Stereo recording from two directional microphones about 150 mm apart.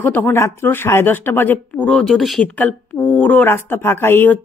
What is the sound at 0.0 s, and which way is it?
Speech, 10° left (ahead or behind).